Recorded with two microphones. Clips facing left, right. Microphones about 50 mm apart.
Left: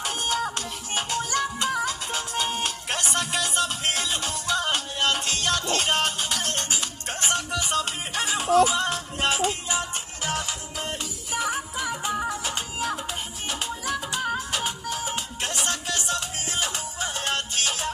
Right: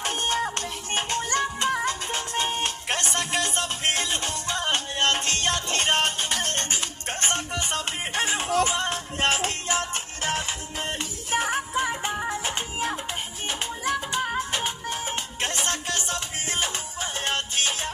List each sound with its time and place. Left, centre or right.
0.0 s music: right
9.3 s music: right
13.9 s music: right